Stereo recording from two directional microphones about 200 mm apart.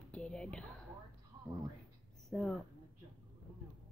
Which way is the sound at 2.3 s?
5° left (ahead or behind).